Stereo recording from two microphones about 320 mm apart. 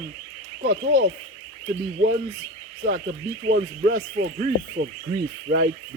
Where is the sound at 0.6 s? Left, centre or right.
Right.